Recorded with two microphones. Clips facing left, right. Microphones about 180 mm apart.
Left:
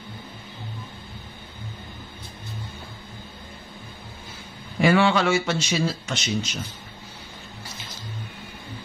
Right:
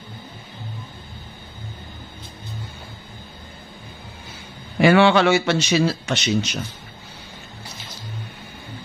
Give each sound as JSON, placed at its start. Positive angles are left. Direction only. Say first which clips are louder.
{"t": 4.7, "sound": "a man's voice", "louder": "right 5 dB", "side_deg": -70}